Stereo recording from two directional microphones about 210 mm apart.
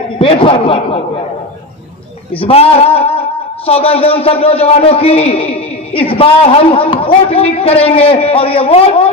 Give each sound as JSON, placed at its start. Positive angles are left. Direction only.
{"t": 0.2, "sound": "a man's voice", "side_deg": 25}
{"t": 2.4, "sound": "a sound", "side_deg": 30}
{"t": 3.7, "sound": "a man's voice", "side_deg": 25}